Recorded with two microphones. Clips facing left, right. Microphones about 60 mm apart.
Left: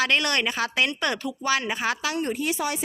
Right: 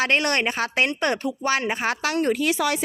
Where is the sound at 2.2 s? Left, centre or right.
Right.